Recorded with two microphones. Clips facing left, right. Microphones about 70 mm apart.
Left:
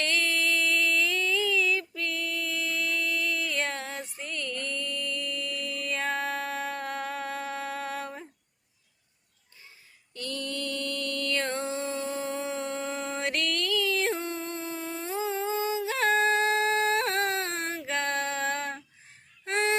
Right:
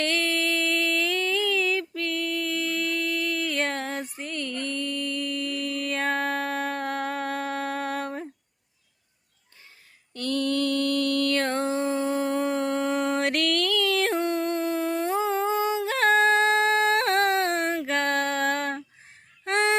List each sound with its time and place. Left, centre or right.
0.0 s music: right
10.2 s mantra: right
19.5 s honk: right